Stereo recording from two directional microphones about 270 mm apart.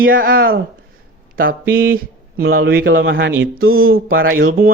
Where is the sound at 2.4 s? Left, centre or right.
Right.